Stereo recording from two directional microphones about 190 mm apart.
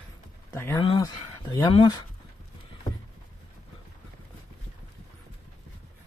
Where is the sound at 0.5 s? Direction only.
15° left (ahead or behind).